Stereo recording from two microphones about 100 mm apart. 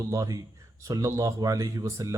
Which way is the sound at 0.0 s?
35° right (ahead or behind).